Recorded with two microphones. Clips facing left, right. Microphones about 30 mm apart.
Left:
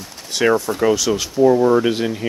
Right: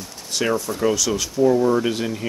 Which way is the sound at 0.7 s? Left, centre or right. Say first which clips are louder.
Left 4 dB; left.